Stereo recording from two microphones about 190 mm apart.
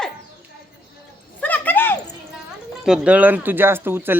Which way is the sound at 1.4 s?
10° left (ahead or behind).